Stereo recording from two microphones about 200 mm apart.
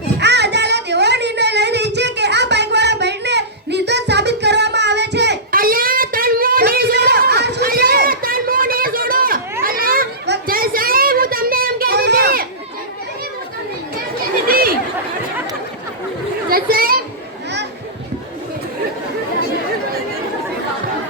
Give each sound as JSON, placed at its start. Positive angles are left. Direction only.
{"t": 0.2, "sound": "a sound", "side_deg": -60}
{"t": 14.4, "sound": "chatter", "side_deg": -45}
{"t": 16.5, "sound": "children playing", "side_deg": -45}